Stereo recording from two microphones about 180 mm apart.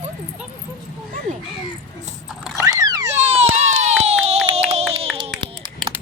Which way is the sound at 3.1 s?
35° right (ahead or behind).